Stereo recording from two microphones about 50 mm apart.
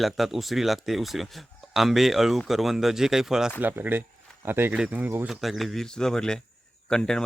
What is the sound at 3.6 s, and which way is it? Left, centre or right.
Speech, right.